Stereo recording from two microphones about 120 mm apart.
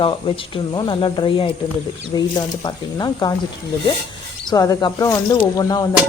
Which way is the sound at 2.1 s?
35° left (ahead or behind).